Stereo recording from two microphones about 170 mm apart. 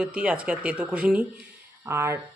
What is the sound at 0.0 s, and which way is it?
Speech, 5° right (ahead or behind).